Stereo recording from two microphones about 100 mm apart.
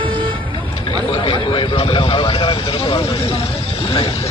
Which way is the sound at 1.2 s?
60° left (ahead or behind).